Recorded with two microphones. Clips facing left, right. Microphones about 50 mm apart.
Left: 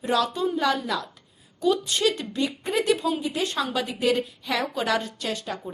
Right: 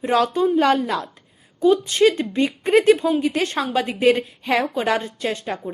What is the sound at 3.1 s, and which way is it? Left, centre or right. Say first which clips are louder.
A woman's voice: right 6 dB; right.